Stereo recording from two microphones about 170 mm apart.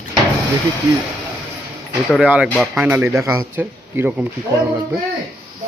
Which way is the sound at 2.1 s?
5° right (ahead or behind).